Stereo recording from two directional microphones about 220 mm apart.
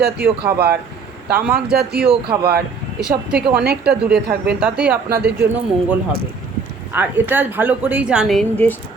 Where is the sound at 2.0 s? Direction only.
25° right (ahead or behind).